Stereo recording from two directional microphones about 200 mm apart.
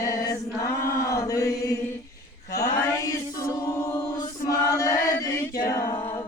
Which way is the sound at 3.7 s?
15° left (ahead or behind).